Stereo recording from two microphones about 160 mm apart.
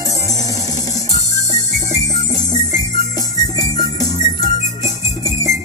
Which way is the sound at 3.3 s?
25° left (ahead or behind).